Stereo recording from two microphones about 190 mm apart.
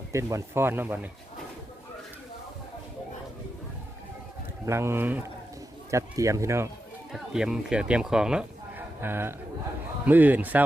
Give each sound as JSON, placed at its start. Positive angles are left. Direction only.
{"t": 0.1, "sound": "speech", "side_deg": -15}
{"t": 4.6, "sound": "speech", "side_deg": -15}
{"t": 7.1, "sound": "speech", "side_deg": 0}